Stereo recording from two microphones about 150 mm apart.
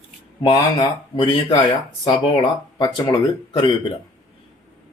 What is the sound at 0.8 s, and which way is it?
Speech, 35° left (ahead or behind).